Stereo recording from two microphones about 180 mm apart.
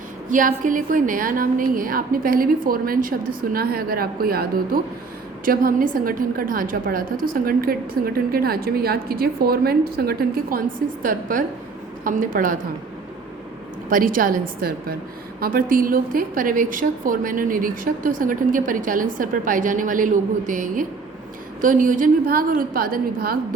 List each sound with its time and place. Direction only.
0.3 s a woman's voice: 45° right (ahead or behind)
13.9 s a woman's voice: 50° right (ahead or behind)